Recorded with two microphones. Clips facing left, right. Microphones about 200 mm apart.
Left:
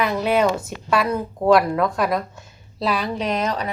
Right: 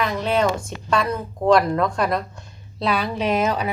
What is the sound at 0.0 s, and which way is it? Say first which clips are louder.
A woman's voice: left 2 dB; 10° left (ahead or behind).